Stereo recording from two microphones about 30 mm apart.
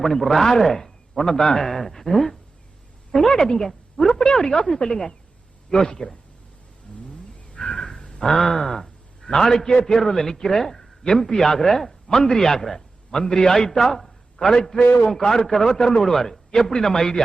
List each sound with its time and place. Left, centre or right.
0.0 s a man's voice: centre
7.0 s vehicle: left
7.9 s a sound: left
8.4 s a man's voice: centre
12.0 s a man's voice: centre
13.1 s a man's voice: left
14.7 s a man's voice: left
15.1 s speech: centre